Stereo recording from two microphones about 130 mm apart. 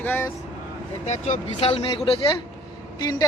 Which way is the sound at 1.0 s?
65° left (ahead or behind).